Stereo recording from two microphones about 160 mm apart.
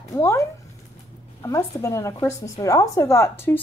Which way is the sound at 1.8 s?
20° left (ahead or behind).